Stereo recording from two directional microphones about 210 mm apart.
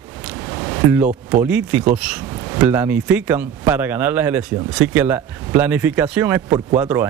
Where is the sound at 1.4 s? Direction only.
10° right (ahead or behind).